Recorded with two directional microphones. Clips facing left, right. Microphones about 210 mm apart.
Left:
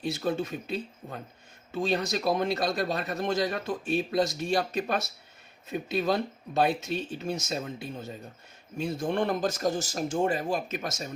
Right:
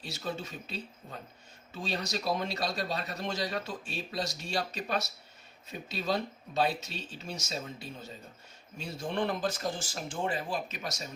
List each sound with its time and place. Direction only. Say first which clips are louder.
0.0 s a man's voice: left 9 dB; 55° left (ahead or behind)